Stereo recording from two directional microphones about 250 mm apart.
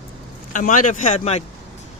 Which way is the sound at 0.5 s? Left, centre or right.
Left.